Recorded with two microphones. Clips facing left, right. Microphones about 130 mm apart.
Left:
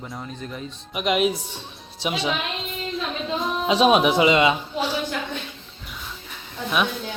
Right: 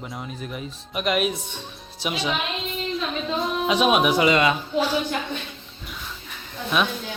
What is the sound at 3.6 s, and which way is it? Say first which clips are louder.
Speech: left 3 dB; 30° left (ahead or behind).